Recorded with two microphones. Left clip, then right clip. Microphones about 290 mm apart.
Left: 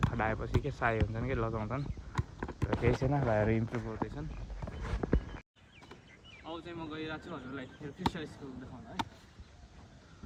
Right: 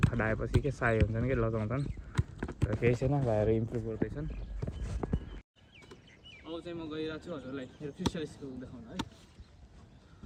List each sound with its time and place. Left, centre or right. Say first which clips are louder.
0.0 s speech: right 1 dB; centre
3.1 s speech: right 1 dB; left
5.0 s a sound: left 4 dB; right
6.4 s speech: right 2 dB; centre